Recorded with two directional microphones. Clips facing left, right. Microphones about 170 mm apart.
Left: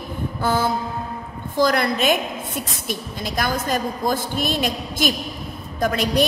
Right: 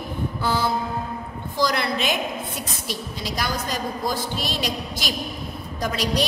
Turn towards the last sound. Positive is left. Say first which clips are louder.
# left 4 dB
turn(degrees=55)  # may be behind; listen again after turning